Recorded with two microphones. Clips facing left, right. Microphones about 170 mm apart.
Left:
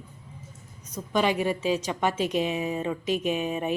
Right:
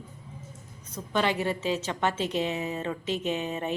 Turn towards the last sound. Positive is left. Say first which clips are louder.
# left 3 dB
turn(degrees=15)  # may be behind; listen again after turning